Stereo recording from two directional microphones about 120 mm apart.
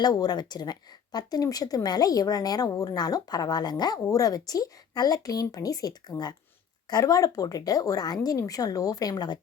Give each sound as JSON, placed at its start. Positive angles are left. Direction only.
{"t": 0.0, "sound": "a woman's voice", "side_deg": 35}